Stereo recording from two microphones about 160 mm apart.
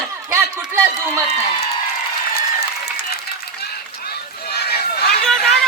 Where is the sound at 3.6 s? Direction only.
75° left (ahead or behind).